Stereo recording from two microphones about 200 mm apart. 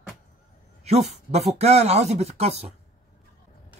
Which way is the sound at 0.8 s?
35° right (ahead or behind).